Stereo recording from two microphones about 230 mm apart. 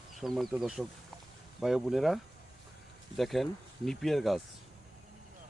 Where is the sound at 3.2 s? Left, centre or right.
Centre.